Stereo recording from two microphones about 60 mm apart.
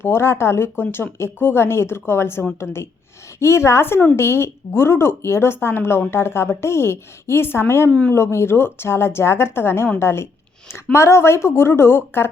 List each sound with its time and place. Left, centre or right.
0.0 s speech: left
3.4 s speech: left